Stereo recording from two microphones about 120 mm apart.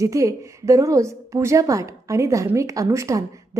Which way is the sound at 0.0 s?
25° right (ahead or behind).